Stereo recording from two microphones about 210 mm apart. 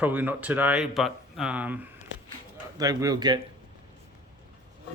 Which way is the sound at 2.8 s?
15° right (ahead or behind).